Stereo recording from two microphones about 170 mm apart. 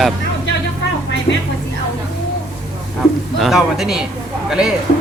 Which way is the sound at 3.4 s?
Centre (ahead or behind).